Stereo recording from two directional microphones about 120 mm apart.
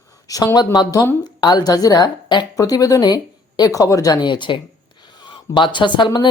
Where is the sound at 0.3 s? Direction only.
30° left (ahead or behind).